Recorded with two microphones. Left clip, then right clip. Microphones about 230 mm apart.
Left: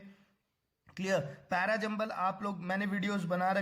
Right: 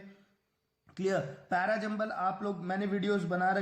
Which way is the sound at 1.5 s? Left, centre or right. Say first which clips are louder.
Right 1 dB; left.